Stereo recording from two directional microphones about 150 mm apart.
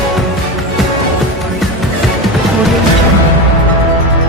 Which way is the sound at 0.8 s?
Centre (ahead or behind).